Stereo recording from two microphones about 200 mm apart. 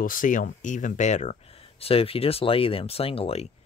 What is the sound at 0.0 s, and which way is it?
Speech, 40° left (ahead or behind).